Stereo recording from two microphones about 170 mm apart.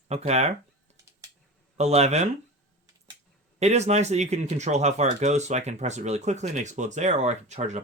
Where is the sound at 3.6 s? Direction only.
40° right (ahead or behind).